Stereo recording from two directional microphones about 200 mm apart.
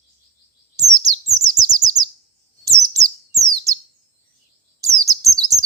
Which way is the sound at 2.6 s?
15° right (ahead or behind).